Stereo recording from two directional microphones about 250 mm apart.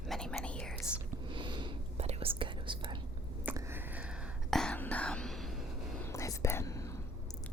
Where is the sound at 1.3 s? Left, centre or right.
Centre.